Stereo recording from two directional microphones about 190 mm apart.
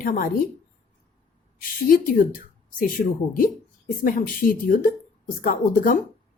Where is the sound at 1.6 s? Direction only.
45° left (ahead or behind).